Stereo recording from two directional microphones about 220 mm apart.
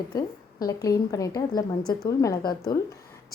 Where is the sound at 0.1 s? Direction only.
15° left (ahead or behind).